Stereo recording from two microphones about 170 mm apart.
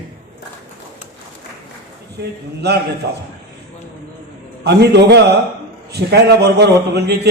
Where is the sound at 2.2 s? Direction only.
75° right (ahead or behind).